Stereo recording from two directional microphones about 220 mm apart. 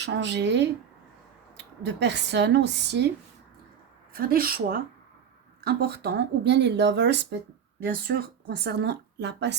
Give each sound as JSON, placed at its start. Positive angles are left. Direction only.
{"t": 0.0, "sound": "speech", "side_deg": -50}
{"t": 4.1, "sound": "speech", "side_deg": -45}